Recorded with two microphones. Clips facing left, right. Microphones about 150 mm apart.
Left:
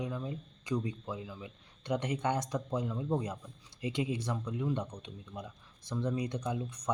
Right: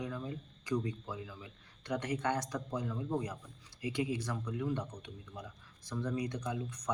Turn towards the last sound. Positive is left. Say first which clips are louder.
# left 3 dB
turn(degrees=20)  # may be behind; listen again after turning